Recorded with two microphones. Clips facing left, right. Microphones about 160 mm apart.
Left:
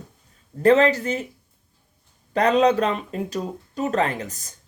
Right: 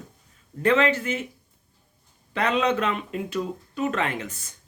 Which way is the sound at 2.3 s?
40° left (ahead or behind).